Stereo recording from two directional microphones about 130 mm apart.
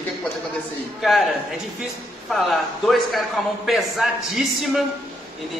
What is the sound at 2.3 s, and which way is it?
A man's voice, centre (ahead or behind).